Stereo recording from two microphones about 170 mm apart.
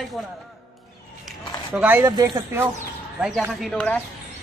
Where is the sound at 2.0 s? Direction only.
25° right (ahead or behind).